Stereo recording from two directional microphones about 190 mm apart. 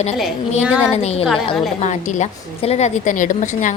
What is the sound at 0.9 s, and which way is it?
Speech, 35° left (ahead or behind).